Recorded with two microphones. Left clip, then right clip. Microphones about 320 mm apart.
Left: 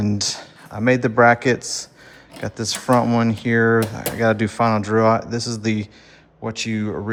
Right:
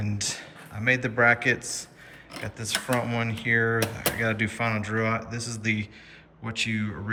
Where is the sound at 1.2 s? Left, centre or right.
Centre.